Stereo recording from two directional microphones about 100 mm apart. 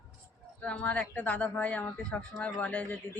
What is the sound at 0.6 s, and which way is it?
Speech, 10° left (ahead or behind).